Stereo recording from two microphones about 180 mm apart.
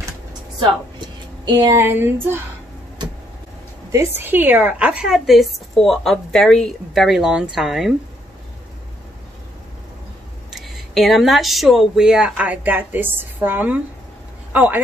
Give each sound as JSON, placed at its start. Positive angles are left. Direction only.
{"t": 0.6, "sound": "a woman's voice", "side_deg": -25}
{"t": 4.2, "sound": "speech", "side_deg": -10}
{"t": 10.5, "sound": "speech", "side_deg": 0}